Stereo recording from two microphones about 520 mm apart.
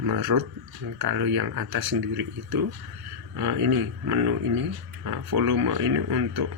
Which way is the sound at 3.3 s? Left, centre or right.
Right.